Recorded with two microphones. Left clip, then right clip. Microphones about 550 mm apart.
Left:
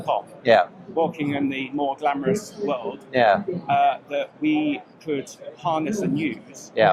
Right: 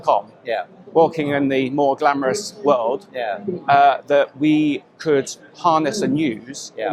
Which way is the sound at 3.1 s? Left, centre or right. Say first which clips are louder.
Left 7 dB; left.